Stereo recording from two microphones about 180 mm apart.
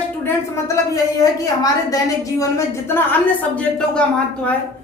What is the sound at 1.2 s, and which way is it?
A woman's voice, 20° left (ahead or behind).